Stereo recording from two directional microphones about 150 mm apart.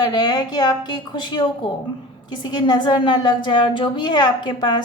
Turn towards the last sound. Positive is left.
turn(degrees=30)  # may be behind; listen again after turning